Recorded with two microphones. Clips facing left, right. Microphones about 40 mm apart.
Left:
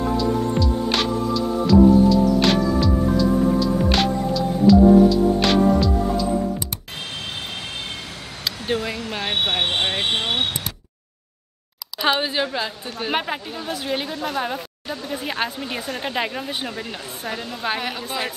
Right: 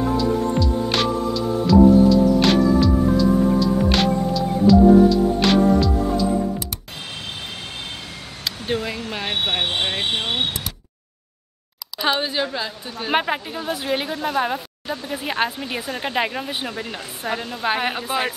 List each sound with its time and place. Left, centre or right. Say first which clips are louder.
0.0 s music: right 1 dB; centre
9.6 s speech: left 1 dB; left
12.0 s a woman's voice: left 1 dB; centre
13.1 s a woman's voice: right 5 dB; centre